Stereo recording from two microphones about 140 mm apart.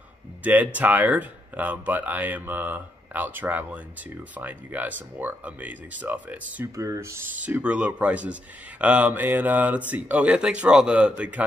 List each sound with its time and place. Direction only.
0.4 s speech: 10° right (ahead or behind)
6.8 s speech: 20° right (ahead or behind)